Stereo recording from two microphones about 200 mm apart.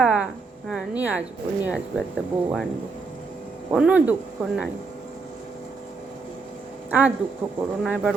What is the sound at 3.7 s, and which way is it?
Speech, 5° right (ahead or behind).